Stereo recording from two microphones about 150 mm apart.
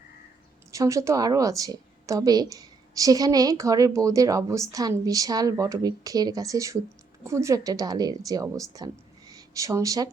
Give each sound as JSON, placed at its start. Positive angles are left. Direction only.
{"t": 0.7, "sound": "a woman's voice", "side_deg": -20}